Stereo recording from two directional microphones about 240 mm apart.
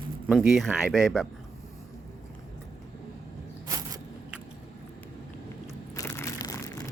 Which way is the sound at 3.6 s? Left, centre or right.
Centre.